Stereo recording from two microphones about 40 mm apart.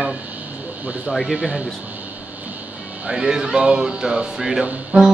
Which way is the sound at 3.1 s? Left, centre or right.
Centre.